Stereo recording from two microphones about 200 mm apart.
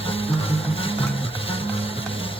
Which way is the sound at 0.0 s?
30° left (ahead or behind).